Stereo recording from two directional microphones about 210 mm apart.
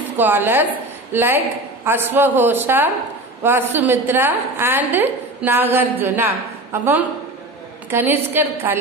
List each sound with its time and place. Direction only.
0.2 s a woman's voice: 10° right (ahead or behind)